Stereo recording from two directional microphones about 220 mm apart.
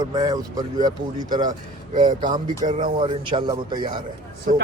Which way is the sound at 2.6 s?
35° right (ahead or behind).